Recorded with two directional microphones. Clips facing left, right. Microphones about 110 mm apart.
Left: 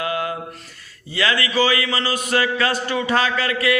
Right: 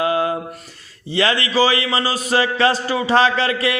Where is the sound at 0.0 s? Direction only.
30° right (ahead or behind).